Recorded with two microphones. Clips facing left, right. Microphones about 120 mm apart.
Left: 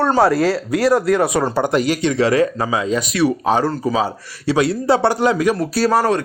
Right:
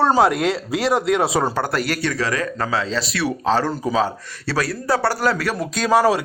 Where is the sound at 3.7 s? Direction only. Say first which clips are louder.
Left 1 dB; centre (ahead or behind).